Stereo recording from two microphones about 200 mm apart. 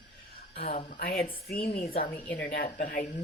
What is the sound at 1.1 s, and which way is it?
Speech, 25° left (ahead or behind).